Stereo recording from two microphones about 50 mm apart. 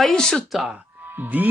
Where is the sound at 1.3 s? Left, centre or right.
Right.